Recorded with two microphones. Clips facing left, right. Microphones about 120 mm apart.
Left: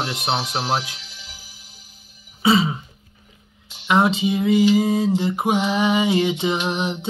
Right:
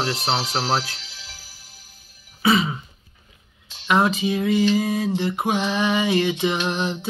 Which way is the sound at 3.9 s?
25° left (ahead or behind).